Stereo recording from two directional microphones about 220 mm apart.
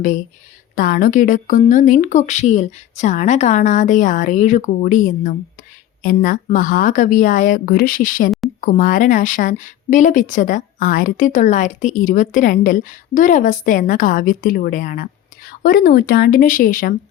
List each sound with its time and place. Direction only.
0.8 s a woman's voice: 40° left (ahead or behind)